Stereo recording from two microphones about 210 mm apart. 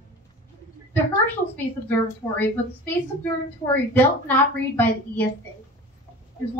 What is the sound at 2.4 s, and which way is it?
A woman's voice, 10° left (ahead or behind).